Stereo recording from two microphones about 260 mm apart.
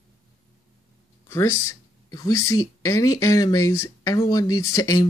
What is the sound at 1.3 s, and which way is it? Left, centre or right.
Speech, centre.